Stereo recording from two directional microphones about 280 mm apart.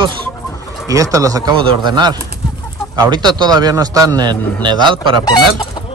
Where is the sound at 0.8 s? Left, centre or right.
Centre.